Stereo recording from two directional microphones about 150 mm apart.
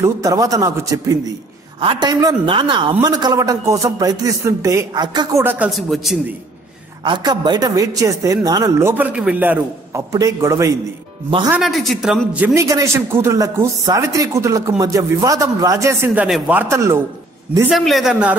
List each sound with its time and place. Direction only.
0.0 s a man's voice: 20° right (ahead or behind)
5.4 s a man's voice: 15° right (ahead or behind)
5.7 s a man's voice: centre (ahead or behind)
7.1 s a man's voice: 30° right (ahead or behind)
11.2 s speech: 30° right (ahead or behind)
11.5 s a man's voice: centre (ahead or behind)
12.5 s a man's voice: 20° right (ahead or behind)
16.3 s a man's voice: centre (ahead or behind)
16.5 s a man's voice: 20° right (ahead or behind)
17.6 s a man's voice: centre (ahead or behind)